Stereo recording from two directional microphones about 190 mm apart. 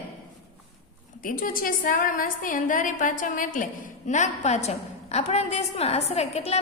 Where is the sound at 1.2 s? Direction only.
45° left (ahead or behind).